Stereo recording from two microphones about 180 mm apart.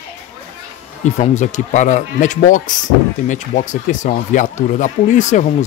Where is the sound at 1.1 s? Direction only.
40° left (ahead or behind).